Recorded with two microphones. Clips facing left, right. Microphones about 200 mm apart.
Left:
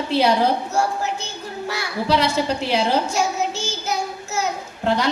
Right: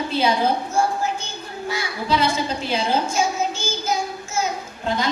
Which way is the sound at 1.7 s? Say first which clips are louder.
Left 2 dB; 70° left (ahead or behind).